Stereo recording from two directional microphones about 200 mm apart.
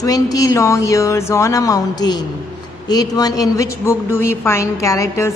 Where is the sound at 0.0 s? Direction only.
15° left (ahead or behind).